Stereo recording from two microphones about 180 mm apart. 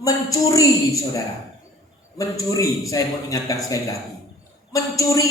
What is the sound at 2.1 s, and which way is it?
Speech, 20° left (ahead or behind).